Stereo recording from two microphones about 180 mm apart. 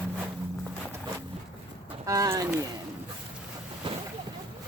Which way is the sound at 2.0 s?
20° right (ahead or behind).